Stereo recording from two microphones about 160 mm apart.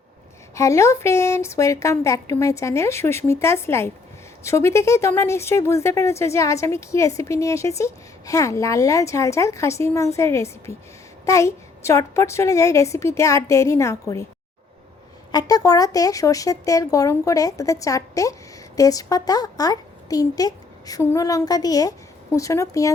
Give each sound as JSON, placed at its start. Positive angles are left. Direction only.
{"t": 0.5, "sound": "a child's voice", "side_deg": 20}
{"t": 15.3, "sound": "a child's voice", "side_deg": 25}